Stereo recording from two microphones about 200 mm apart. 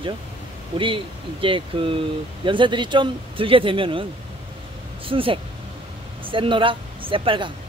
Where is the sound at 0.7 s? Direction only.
25° right (ahead or behind).